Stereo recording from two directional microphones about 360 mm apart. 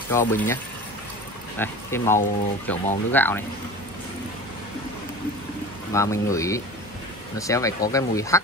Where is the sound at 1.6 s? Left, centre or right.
Centre.